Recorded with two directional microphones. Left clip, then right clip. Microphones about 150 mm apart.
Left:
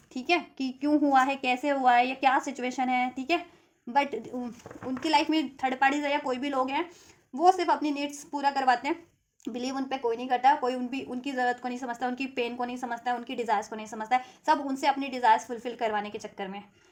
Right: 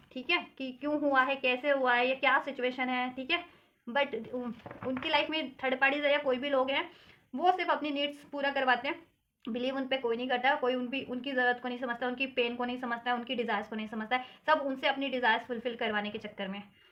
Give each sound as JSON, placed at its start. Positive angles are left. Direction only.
{"t": 0.1, "sound": "a woman's voice", "side_deg": 50}